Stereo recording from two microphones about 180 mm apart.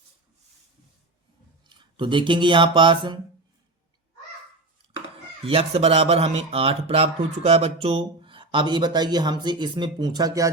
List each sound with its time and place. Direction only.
1.6 s speech: 25° right (ahead or behind)
5.5 s speech: 30° right (ahead or behind)